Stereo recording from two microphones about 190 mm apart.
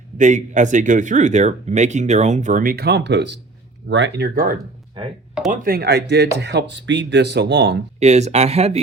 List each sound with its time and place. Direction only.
0.2 s speech: 40° right (ahead or behind); by 7.8 s 65° right (ahead or behind)
7.9 s speech: 35° right (ahead or behind)